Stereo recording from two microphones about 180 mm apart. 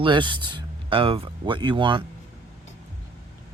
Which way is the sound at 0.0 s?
25° right (ahead or behind).